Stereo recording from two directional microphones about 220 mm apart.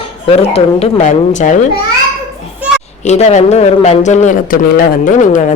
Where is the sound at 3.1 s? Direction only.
30° left (ahead or behind).